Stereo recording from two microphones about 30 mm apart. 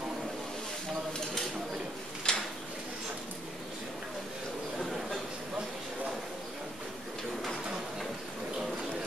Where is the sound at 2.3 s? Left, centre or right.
Left.